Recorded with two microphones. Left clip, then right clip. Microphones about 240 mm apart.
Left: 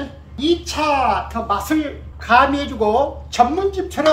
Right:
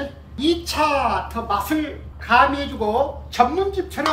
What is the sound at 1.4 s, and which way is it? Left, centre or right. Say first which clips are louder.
Speech: left 3 dB; centre.